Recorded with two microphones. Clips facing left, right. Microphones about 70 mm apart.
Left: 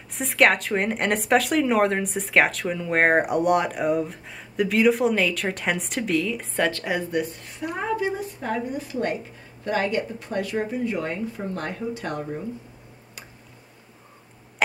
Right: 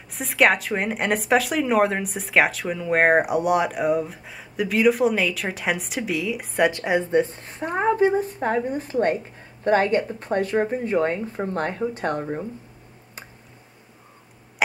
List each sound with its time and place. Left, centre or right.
0.1 s a woman's voice: centre; by 12.4 s right